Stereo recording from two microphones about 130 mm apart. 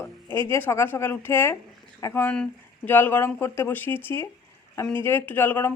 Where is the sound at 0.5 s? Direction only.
20° left (ahead or behind).